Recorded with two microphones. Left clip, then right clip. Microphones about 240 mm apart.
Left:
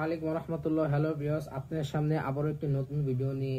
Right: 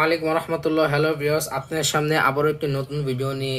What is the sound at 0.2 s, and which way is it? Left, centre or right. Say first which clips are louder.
Speech: right 11 dB; centre.